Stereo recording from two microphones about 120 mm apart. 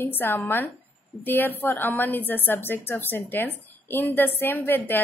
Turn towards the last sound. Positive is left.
turn(degrees=20)  # may be behind; listen again after turning